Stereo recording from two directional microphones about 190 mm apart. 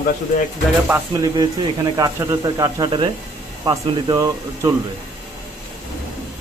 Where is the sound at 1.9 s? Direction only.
15° right (ahead or behind).